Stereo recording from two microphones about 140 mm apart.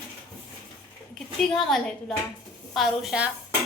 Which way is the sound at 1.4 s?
5° left (ahead or behind).